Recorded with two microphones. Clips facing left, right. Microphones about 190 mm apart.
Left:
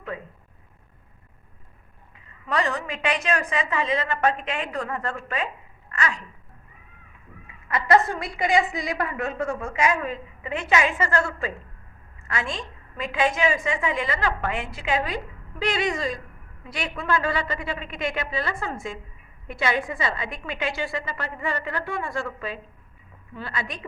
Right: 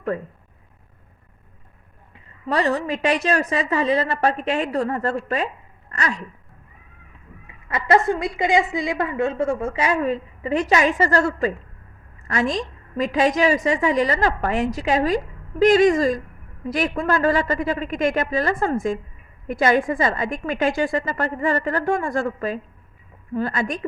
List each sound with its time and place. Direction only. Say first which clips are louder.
2.5 s a woman's voice: right 5 dB; 35° right (ahead or behind)
5.9 s a sound: right 2 dB; 40° right (ahead or behind)
7.7 s a woman's voice: right 2 dB; 25° right (ahead or behind); by 23.8 s 45° right (ahead or behind)